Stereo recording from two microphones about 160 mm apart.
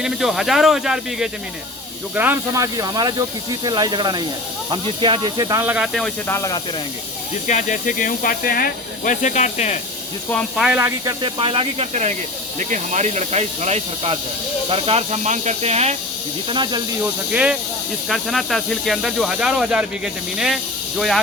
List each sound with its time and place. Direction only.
0.0 s speech: centre (ahead or behind)
2.7 s speech: 25° right (ahead or behind)
5.6 s speech: 5° right (ahead or behind)
6.2 s speech: 20° left (ahead or behind)
7.4 s speech: 50° left (ahead or behind)
10.6 s speech: 5° right (ahead or behind)
10.8 s speech: 30° right (ahead or behind)
16.5 s speech: 30° right (ahead or behind)
17.0 s speech: 5° right (ahead or behind)